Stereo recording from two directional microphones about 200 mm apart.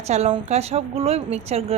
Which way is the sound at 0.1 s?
35° right (ahead or behind).